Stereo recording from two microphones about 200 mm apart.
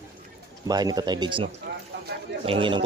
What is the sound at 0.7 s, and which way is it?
Speech, 20° right (ahead or behind).